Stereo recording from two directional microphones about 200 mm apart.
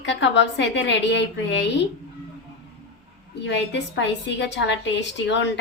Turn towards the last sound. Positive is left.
turn(degrees=65)  # may be behind; listen again after turning